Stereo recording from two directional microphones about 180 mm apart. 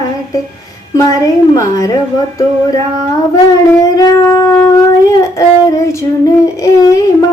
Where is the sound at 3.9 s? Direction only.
20° left (ahead or behind).